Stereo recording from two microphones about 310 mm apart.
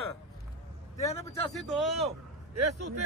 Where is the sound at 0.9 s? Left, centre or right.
Left.